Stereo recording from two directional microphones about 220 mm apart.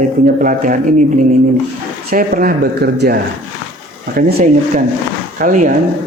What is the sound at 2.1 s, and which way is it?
A man's voice, 40° right (ahead or behind).